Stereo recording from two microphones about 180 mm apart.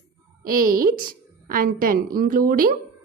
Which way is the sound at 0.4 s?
50° right (ahead or behind).